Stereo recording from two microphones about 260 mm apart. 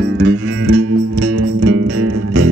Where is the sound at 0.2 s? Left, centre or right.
Right.